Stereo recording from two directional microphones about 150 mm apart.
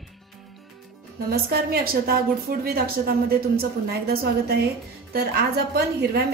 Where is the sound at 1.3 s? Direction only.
90° right.